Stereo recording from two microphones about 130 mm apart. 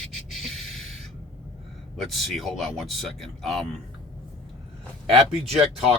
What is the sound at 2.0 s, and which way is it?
Speech, centre (ahead or behind).